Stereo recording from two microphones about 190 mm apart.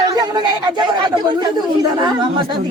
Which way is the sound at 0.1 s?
20° right (ahead or behind).